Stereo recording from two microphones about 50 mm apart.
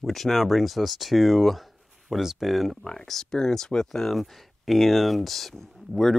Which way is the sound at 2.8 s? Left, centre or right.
Centre.